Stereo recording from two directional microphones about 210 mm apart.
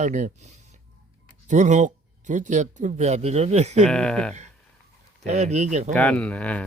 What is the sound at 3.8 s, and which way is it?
Speech, 5° left (ahead or behind).